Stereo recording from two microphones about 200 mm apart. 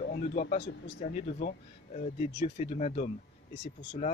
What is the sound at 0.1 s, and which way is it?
Speech, 45° left (ahead or behind).